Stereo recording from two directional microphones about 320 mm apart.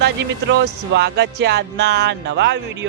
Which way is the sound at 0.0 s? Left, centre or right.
Right.